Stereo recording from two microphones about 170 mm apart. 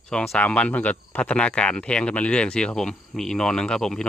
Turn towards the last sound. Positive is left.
turn(degrees=5)  # may be behind; listen again after turning